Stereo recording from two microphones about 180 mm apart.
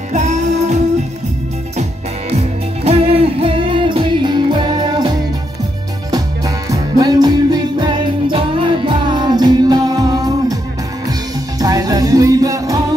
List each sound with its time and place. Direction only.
0.1 s music: 40° right (ahead or behind)
2.3 s music: 35° right (ahead or behind)
6.1 s music: 20° right (ahead or behind)